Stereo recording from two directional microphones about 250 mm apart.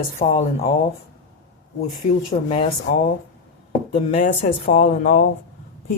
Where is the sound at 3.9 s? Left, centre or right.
Left.